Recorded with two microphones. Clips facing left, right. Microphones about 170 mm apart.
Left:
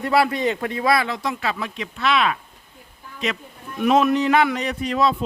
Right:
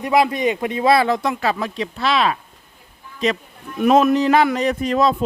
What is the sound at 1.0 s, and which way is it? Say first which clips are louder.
A man's voice: right 6 dB; 55° right (ahead or behind).